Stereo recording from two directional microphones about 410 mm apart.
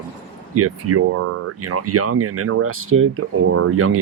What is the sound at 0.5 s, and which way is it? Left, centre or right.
Speech, right.